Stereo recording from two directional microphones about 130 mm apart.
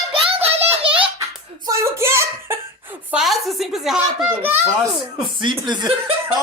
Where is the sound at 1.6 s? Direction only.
20° right (ahead or behind).